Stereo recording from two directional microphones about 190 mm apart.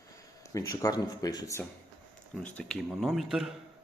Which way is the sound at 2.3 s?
5° left (ahead or behind).